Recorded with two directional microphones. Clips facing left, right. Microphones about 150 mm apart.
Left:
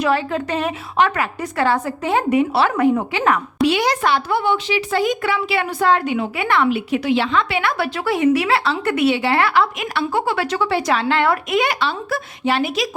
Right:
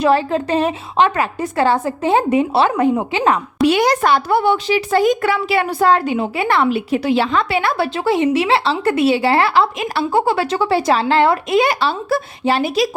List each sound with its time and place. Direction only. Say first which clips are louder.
0.0 s a woman's voice: right 4 dB; 30° right (ahead or behind)
3.7 s speech: right 4 dB; 45° right (ahead or behind)